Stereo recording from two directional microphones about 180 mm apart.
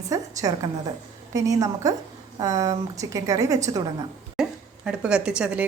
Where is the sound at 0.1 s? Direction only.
20° right (ahead or behind).